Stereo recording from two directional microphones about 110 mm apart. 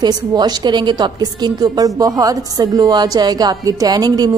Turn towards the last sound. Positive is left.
turn(degrees=-35)  # may be behind; listen again after turning